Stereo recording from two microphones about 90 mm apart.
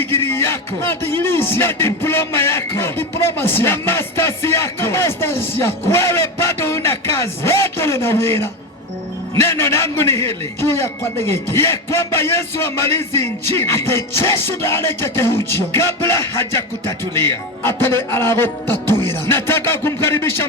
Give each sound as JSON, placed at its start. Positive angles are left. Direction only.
{"t": 0.0, "sound": "speech", "side_deg": 25}